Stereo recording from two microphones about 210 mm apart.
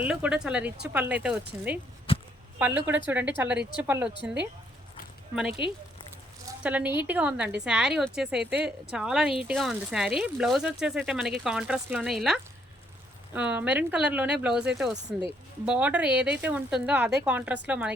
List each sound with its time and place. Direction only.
0.0 s speech: 5° right (ahead or behind)
2.1 s a sound: 25° left (ahead or behind)
2.6 s speech: 10° right (ahead or behind)
5.3 s speech: 5° right (ahead or behind)